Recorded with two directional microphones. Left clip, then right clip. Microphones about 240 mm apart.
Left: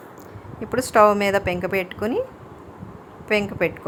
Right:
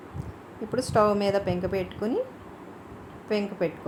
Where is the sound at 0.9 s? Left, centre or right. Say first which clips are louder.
Left 7 dB; centre.